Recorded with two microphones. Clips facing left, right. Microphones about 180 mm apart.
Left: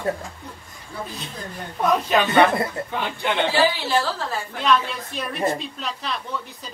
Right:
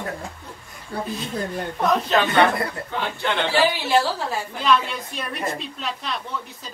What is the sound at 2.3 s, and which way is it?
A man's voice, 20° left (ahead or behind).